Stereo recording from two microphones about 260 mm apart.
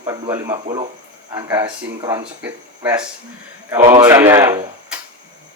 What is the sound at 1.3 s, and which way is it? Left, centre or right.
Speech, centre.